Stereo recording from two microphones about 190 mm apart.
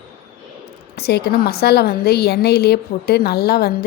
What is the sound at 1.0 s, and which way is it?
A woman's voice, 60° left (ahead or behind).